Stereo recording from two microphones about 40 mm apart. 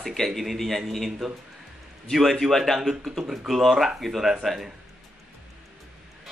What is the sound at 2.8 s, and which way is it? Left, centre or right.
Speech, centre.